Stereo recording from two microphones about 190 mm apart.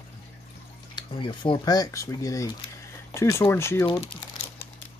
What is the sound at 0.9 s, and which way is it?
Speech, 25° left (ahead or behind).